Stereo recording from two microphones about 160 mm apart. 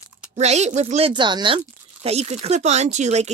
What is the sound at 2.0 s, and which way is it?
Speech, 40° right (ahead or behind).